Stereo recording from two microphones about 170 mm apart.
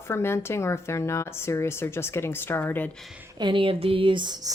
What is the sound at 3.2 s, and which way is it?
Speech, 25° right (ahead or behind).